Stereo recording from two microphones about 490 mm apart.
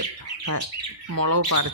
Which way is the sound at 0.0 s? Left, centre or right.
Right.